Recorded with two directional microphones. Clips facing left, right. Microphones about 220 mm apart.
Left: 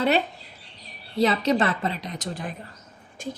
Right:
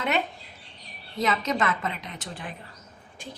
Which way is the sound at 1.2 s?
35° left (ahead or behind).